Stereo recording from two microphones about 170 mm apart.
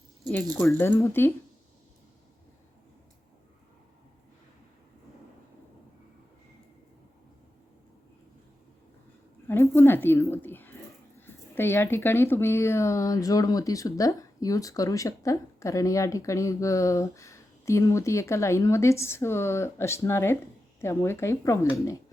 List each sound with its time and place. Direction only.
0.5 s a woman's voice: 10° left (ahead or behind)
9.5 s a sound: 15° left (ahead or behind)
11.3 s a woman's voice: 15° left (ahead or behind)